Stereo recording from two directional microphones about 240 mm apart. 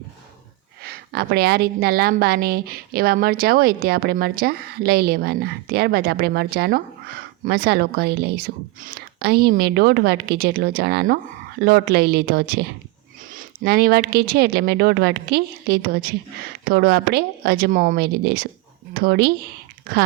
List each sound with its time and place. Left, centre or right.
0.8 s a woman's voice: right